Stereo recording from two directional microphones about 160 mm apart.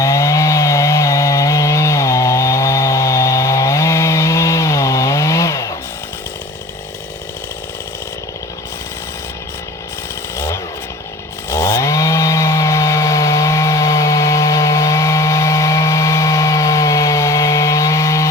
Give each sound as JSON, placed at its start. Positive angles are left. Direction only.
{"t": 0.0, "sound": "chainsaw", "side_deg": 20}
{"t": 10.3, "sound": "chainsaw", "side_deg": 15}